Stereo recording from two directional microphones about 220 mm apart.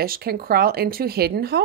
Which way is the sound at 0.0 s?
45° right (ahead or behind).